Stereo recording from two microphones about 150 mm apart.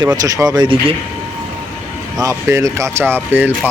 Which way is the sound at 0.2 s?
25° right (ahead or behind).